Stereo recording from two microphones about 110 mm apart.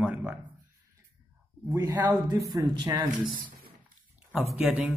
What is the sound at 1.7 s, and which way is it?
Speech, 30° right (ahead or behind).